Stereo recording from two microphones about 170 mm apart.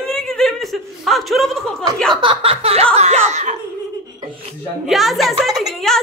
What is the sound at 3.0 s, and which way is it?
Chuckle, 40° right (ahead or behind).